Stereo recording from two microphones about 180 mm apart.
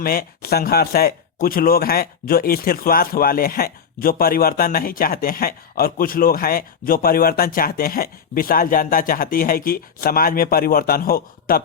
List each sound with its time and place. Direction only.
0.0 s speech: 55° left (ahead or behind)